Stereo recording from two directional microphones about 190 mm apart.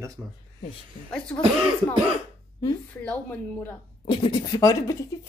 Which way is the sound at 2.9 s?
10° left (ahead or behind).